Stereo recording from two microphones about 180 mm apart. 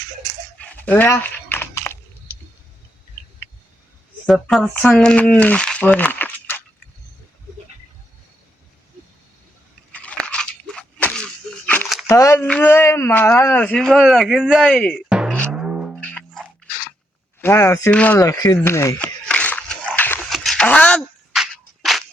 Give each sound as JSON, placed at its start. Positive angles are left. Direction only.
{"t": 0.6, "sound": "dog", "side_deg": 10}
{"t": 4.3, "sound": "speech", "side_deg": 0}
{"t": 9.9, "sound": "crunch", "side_deg": 5}
{"t": 12.0, "sound": "speech", "side_deg": 15}
{"t": 15.1, "sound": "music", "side_deg": -5}
{"t": 16.0, "sound": "music", "side_deg": 5}
{"t": 17.4, "sound": "a sound", "side_deg": 15}